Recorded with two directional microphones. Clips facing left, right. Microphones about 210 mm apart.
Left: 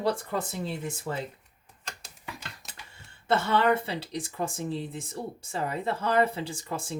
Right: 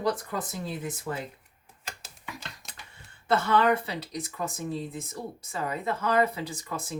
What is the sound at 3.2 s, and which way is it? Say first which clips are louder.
Speech: right 1 dB; 25° left (ahead or behind).